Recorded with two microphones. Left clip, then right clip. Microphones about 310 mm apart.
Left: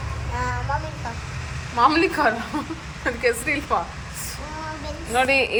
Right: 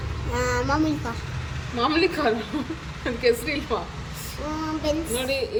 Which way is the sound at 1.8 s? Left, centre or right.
Centre.